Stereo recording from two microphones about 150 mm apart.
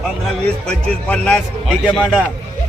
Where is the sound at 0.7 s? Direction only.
5° left (ahead or behind).